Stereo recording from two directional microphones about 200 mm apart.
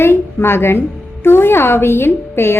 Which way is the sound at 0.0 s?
10° left (ahead or behind).